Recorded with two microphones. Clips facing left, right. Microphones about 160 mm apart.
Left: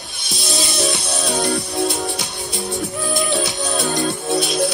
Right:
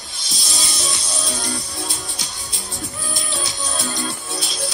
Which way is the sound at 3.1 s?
65° left (ahead or behind).